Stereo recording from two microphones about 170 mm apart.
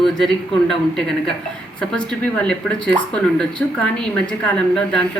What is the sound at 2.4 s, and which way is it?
Speech, 5° left (ahead or behind).